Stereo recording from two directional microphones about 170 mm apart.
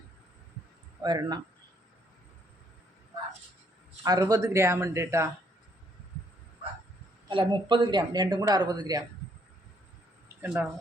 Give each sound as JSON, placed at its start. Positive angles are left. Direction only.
{"t": 1.0, "sound": "speech", "side_deg": -25}
{"t": 4.0, "sound": "speech", "side_deg": -20}
{"t": 7.3, "sound": "speech", "side_deg": -30}
{"t": 10.2, "sound": "a sound", "side_deg": -10}